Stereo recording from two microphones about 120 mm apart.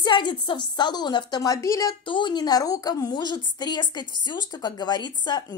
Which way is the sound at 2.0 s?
40° left (ahead or behind).